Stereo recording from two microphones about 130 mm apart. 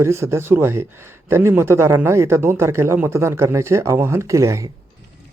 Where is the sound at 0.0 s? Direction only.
20° right (ahead or behind).